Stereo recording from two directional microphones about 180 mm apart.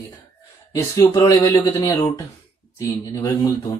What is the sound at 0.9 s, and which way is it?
Speech, 15° left (ahead or behind).